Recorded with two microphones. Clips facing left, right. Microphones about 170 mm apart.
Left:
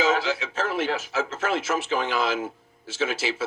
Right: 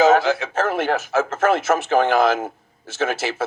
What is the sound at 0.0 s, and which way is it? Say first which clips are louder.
Speech: right 8 dB; 50° right (ahead or behind).